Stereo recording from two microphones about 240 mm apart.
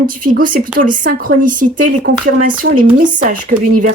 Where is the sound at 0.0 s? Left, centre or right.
Right.